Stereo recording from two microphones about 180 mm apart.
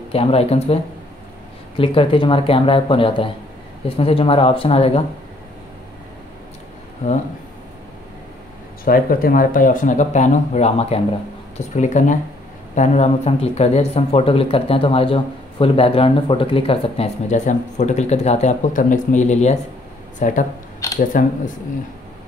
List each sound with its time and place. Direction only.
0.1 s speech: 35° left (ahead or behind)
1.8 s speech: 30° left (ahead or behind)
8.8 s speech: 50° left (ahead or behind)
20.8 s camera: 15° left (ahead or behind)